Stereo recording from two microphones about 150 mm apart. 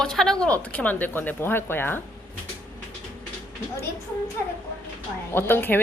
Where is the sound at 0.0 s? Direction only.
5° left (ahead or behind).